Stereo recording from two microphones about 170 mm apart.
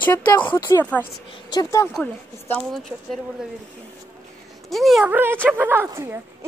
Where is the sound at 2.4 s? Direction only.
5° left (ahead or behind).